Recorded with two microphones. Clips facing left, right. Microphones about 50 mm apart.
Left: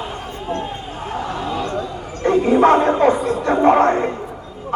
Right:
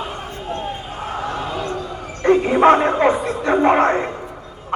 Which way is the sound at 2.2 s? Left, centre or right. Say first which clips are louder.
Right 1 dB; right.